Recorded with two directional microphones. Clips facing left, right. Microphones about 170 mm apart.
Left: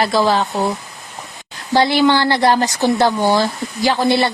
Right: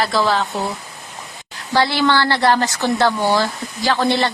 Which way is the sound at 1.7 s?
15° left (ahead or behind).